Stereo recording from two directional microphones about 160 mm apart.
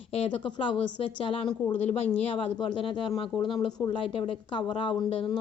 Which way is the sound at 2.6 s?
30° left (ahead or behind).